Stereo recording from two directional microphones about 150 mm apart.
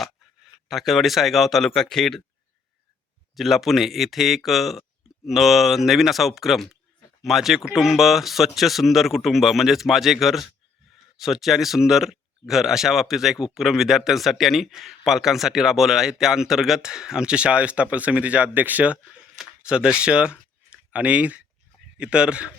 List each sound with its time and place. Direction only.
0.0 s speech: centre (ahead or behind)
3.3 s speech: centre (ahead or behind)
20.7 s a sound: 10° right (ahead or behind)
21.9 s a man's voice: 5° right (ahead or behind)